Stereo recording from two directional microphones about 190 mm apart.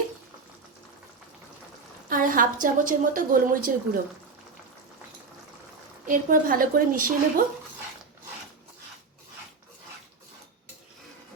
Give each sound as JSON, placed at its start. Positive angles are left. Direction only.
{"t": 2.0, "sound": "a woman's voice", "side_deg": -45}
{"t": 6.1, "sound": "a woman's voice", "side_deg": -45}